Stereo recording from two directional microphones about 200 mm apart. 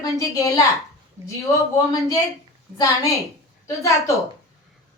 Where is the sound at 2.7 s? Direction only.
15° left (ahead or behind).